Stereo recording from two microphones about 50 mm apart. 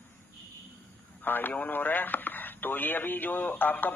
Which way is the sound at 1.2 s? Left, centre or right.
Left.